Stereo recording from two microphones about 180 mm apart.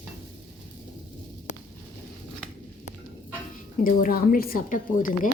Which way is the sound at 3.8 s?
50° left (ahead or behind).